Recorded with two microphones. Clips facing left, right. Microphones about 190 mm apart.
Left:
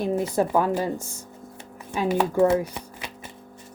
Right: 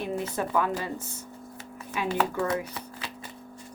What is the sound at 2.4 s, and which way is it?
Speech, 25° left (ahead or behind).